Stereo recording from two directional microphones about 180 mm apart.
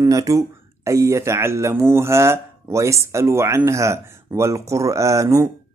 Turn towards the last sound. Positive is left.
turn(degrees=-15)  # may be behind; listen again after turning